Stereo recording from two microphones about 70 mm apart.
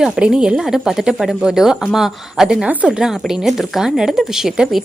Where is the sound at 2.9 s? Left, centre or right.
Centre.